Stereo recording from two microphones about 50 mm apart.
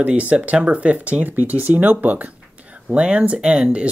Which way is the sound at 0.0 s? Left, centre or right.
Right.